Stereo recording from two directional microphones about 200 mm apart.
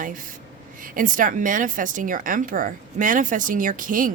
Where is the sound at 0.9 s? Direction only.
40° right (ahead or behind).